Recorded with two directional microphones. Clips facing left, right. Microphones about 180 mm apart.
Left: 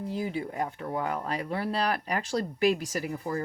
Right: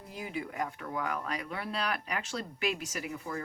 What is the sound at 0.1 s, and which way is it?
Speech, 30° left (ahead or behind).